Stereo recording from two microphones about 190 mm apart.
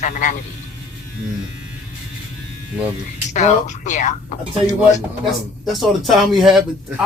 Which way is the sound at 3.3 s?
40° left (ahead or behind).